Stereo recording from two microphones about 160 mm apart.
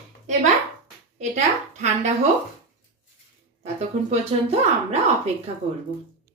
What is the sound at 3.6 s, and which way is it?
Speech, 40° right (ahead or behind).